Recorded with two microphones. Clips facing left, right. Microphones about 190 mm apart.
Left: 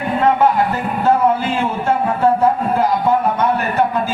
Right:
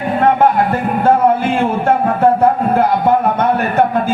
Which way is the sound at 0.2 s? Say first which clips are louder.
Right 2 dB; 55° right (ahead or behind).